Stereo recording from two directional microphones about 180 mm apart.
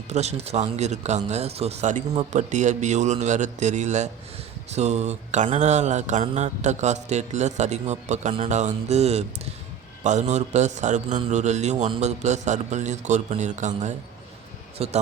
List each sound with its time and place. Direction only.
0.1 s mantra: 40° right (ahead or behind)